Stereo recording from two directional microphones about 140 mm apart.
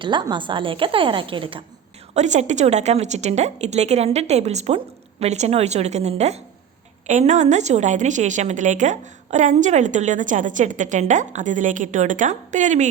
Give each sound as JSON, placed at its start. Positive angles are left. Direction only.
{"t": 0.0, "sound": "a woman's voice", "side_deg": -35}
{"t": 2.1, "sound": "a woman's voice", "side_deg": -55}